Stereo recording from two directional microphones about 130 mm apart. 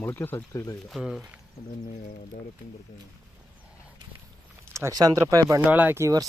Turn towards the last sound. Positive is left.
turn(degrees=-20)  # may be behind; listen again after turning